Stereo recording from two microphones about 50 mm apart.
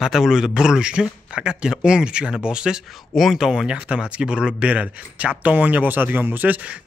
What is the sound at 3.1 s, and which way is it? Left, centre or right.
Speech, centre.